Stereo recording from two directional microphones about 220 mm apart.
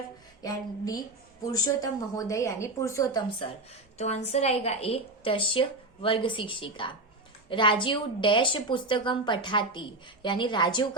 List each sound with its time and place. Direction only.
0.4 s a woman's voice: 15° left (ahead or behind)
3.9 s a woman's voice: 30° left (ahead or behind)